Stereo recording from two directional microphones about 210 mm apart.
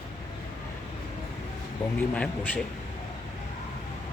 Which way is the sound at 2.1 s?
5° left (ahead or behind).